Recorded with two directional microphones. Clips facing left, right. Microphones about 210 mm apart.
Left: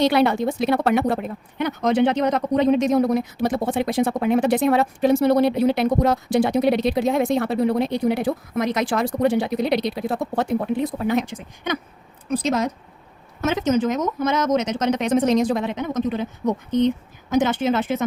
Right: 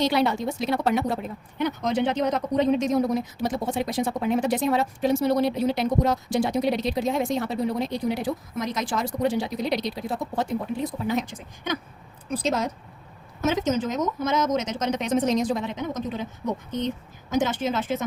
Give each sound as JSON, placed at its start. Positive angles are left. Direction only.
{"t": 0.0, "sound": "speech", "side_deg": 60}
{"t": 13.4, "sound": "speech", "side_deg": 60}
{"t": 17.3, "sound": "speech", "side_deg": 65}